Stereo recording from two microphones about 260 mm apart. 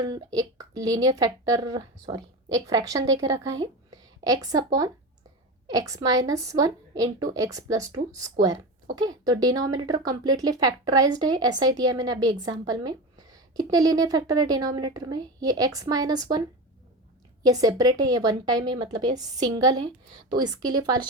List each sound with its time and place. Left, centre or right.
0.0 s a woman's voice: centre
17.4 s a woman's voice: centre